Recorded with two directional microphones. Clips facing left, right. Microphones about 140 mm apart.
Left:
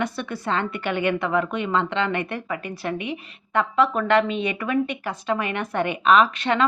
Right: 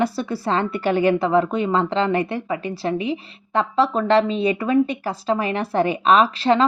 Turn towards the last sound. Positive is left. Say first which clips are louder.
# right 3 dB
turn(degrees=-35)  # may be behind; listen again after turning